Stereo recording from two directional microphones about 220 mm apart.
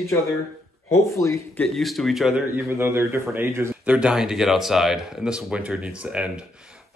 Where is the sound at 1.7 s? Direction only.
Centre (ahead or behind).